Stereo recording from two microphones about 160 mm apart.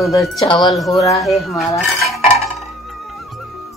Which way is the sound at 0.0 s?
20° left (ahead or behind).